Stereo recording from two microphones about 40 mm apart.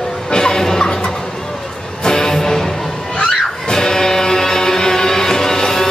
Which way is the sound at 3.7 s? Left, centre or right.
Centre.